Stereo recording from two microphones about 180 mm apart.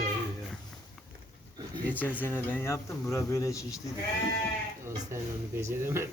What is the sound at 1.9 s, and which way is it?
Speech, 10° left (ahead or behind).